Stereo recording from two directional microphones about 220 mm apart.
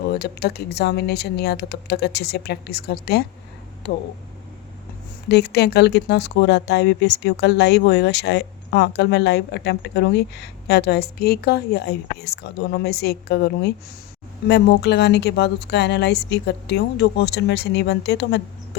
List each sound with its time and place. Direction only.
0.0 s speech: 50° left (ahead or behind)
5.3 s speech: 50° left (ahead or behind)